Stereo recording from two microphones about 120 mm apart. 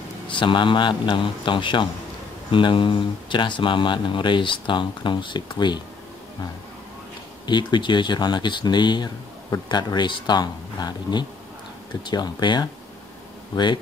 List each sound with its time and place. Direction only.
0.3 s a man's voice: 40° left (ahead or behind)
7.4 s speech: 40° left (ahead or behind)